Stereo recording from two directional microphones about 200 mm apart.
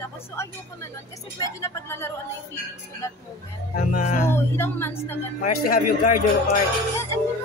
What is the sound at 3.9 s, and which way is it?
Speech, 35° left (ahead or behind).